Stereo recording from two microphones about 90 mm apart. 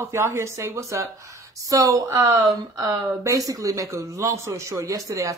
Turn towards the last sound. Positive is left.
turn(degrees=-35)  # may be behind; listen again after turning